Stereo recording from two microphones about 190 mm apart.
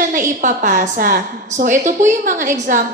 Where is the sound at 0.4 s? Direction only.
40° right (ahead or behind).